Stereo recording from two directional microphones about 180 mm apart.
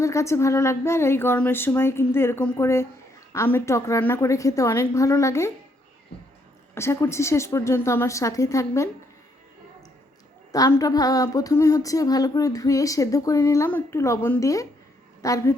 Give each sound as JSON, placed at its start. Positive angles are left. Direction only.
{"t": 0.0, "sound": "speech", "side_deg": 15}
{"t": 6.7, "sound": "speech", "side_deg": 15}
{"t": 10.5, "sound": "speech", "side_deg": 20}